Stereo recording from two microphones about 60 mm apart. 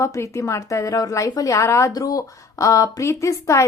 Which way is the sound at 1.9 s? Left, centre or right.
Left.